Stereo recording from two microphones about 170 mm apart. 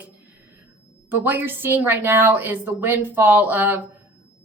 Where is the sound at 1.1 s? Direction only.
10° right (ahead or behind).